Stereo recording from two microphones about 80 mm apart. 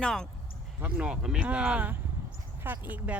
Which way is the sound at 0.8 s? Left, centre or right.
Centre.